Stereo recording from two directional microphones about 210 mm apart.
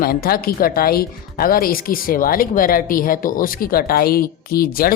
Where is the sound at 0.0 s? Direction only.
45° left (ahead or behind).